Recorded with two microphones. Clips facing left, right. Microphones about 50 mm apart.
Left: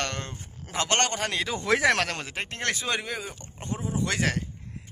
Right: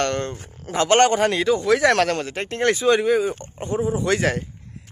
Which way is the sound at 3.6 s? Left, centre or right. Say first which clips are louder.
Right 9 dB; right.